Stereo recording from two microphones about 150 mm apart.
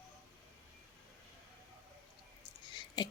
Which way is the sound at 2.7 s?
30° left (ahead or behind).